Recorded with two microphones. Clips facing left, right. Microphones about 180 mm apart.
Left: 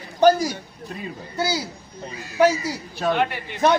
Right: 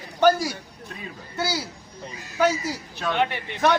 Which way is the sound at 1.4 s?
20° left (ahead or behind).